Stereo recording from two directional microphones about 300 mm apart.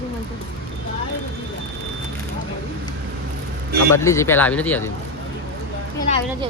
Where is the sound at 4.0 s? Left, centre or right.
Centre.